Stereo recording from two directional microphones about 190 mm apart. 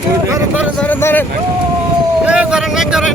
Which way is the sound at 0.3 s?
15° right (ahead or behind).